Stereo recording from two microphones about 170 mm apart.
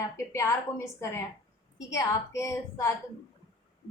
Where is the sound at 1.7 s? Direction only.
20° left (ahead or behind).